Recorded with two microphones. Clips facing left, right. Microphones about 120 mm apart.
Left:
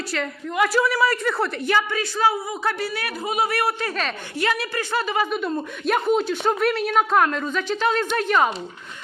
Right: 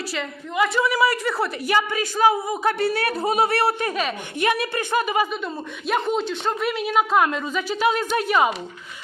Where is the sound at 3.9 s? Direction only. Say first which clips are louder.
Right 2 dB; 10° right (ahead or behind).